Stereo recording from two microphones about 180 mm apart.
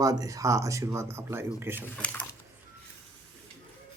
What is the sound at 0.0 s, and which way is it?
Speech, 20° right (ahead or behind).